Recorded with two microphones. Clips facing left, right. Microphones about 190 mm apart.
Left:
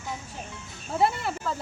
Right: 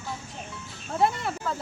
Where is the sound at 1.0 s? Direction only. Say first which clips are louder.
Even; centre (ahead or behind).